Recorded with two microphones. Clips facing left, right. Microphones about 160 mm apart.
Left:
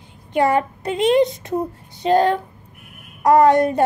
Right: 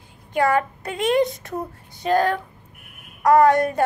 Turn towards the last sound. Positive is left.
turn(degrees=20)  # may be behind; listen again after turning